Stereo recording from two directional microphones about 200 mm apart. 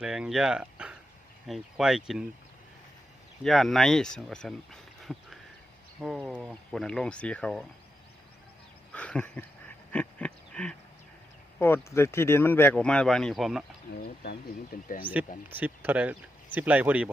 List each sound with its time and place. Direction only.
0.0 s speech: 5° right (ahead or behind)
3.4 s speech: centre (ahead or behind)
8.9 s a sound: 5° left (ahead or behind)
11.6 s speech: 10° left (ahead or behind)
14.0 s speech: 50° left (ahead or behind)
15.4 s speech: 10° right (ahead or behind)